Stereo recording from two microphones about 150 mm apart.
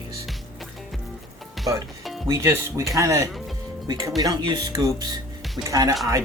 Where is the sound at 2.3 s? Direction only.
20° right (ahead or behind).